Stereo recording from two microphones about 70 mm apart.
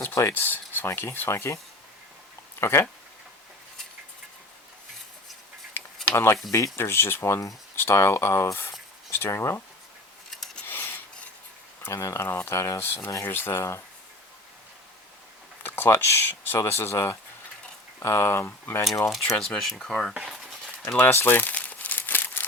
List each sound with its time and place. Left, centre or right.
0.0 s speech: left
0.3 s speech: left
2.6 s speech: left
6.1 s speech: left
10.3 s rub: centre
10.7 s filing: left
11.8 s speech: left
15.6 s speech: left
19.1 s speech: centre
21.1 s crumpling: left